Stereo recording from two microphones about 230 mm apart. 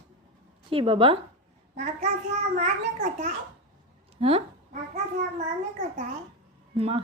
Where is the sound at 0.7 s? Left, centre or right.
Right.